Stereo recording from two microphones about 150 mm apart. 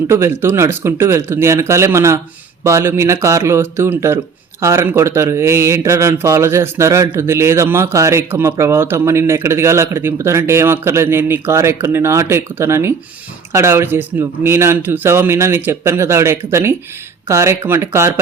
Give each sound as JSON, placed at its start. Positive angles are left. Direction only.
{"t": 0.1, "sound": "speech", "side_deg": -15}